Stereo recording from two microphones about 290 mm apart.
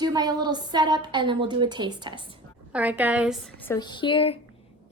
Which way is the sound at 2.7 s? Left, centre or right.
Centre.